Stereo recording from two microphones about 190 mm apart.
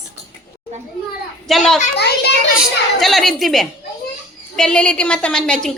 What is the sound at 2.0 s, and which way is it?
Speech, 60° left (ahead or behind).